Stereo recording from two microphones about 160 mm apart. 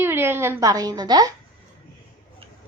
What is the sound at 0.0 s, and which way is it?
A woman's voice, 15° right (ahead or behind).